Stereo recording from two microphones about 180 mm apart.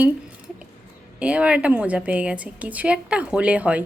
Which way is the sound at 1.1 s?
5° right (ahead or behind).